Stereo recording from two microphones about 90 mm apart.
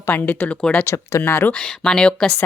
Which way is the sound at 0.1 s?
15° left (ahead or behind).